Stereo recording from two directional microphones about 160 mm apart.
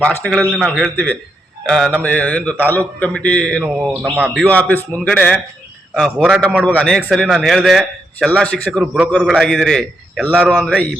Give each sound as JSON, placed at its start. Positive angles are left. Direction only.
{"t": 0.0, "sound": "a man's voice", "side_deg": 5}
{"t": 3.6, "sound": "a man's voice", "side_deg": -10}
{"t": 4.4, "sound": "a man's voice", "side_deg": 10}
{"t": 6.7, "sound": "a man's voice", "side_deg": 5}